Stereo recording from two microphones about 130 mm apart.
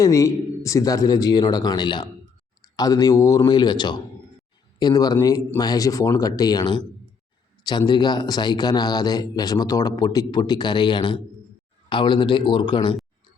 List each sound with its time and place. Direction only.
0.0 s a man's voice: 25° left (ahead or behind)